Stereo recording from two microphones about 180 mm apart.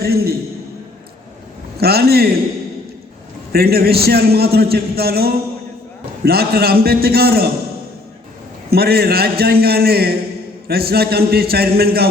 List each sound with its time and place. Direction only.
0.0 s a man's voice: 60° right (ahead or behind)
1.8 s a man's voice: 60° right (ahead or behind)
3.5 s a man's voice: 60° right (ahead or behind)
8.7 s a man's voice: 60° right (ahead or behind)